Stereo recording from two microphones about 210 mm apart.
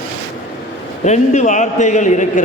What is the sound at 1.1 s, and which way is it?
A man's voice, 35° left (ahead or behind).